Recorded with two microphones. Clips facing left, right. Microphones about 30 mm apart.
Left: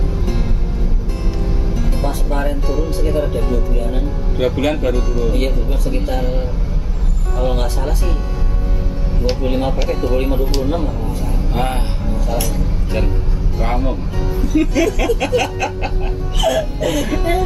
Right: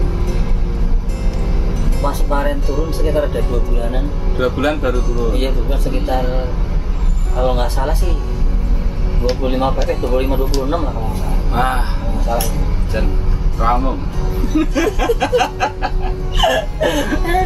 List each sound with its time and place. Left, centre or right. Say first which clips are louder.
2.0 s music: right 4 dB; centre
3.1 s speech: right 3 dB; centre
4.4 s speech: even; centre
5.4 s speech: even; centre
9.4 s speech: right 3 dB; centre
9.8 s speech: right 1 dB; centre
10.1 s speech: right 1 dB; centre
14.5 s speech: left 1 dB; centre
16.4 s a sound: right 2 dB; right
16.8 s speech: right 5 dB; centre
17.1 s speech: even; centre